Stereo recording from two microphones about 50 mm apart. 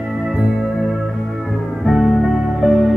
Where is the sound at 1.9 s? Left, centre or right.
Centre.